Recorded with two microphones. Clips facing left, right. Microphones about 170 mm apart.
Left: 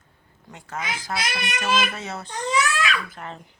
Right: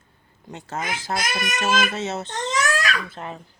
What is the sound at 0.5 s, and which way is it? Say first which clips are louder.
Speech: right 6 dB; 20° right (ahead or behind).